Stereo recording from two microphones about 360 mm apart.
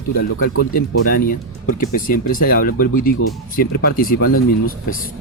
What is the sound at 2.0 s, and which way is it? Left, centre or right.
Speech, left.